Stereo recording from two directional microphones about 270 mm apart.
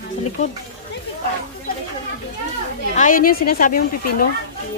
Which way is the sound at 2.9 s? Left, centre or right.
Left.